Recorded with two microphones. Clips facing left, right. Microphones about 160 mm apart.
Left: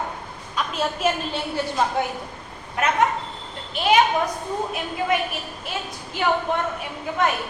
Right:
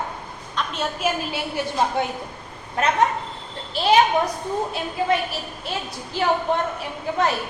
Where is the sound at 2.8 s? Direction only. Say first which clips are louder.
Right 1 dB; 35° right (ahead or behind).